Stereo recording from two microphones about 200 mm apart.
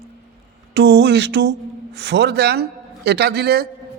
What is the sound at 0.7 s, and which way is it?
A man's voice, 60° right (ahead or behind).